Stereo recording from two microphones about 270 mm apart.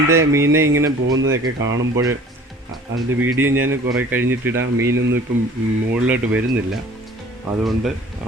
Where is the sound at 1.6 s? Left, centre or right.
Centre.